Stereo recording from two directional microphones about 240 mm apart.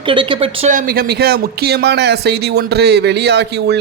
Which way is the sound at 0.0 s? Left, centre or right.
Right.